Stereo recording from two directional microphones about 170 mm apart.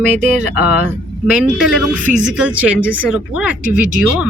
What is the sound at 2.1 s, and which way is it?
Speech, 50° right (ahead or behind).